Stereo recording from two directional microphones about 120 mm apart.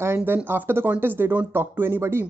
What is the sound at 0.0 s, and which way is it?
Speech, 20° right (ahead or behind).